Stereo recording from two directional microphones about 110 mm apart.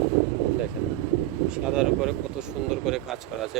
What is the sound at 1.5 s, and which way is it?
Speech, 5° right (ahead or behind).